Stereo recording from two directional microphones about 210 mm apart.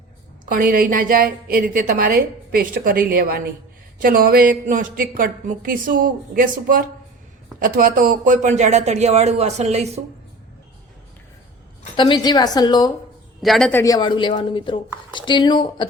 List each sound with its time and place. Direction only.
0.4 s a woman's voice: 40° right (ahead or behind)
11.9 s speech: 20° left (ahead or behind)
13.4 s speech: centre (ahead or behind); by 15.9 s 20° left (ahead or behind)